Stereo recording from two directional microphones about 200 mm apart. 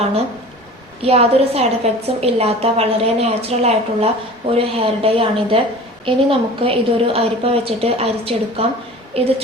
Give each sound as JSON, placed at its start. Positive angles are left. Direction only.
{"t": 1.0, "sound": "a woman's voice", "side_deg": -30}